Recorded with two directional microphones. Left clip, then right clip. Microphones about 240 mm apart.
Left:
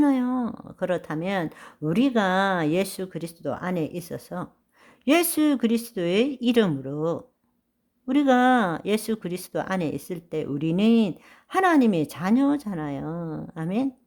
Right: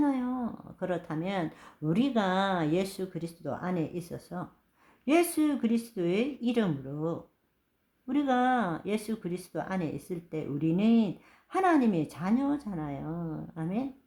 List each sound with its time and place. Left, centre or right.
0.0 s speech: left